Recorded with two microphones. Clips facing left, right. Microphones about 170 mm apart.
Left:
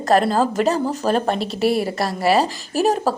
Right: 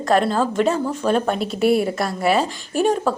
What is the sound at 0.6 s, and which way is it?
Speech, 40° left (ahead or behind).